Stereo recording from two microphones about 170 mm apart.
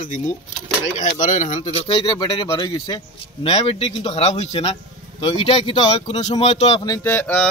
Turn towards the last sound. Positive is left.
turn(degrees=10)  # may be behind; listen again after turning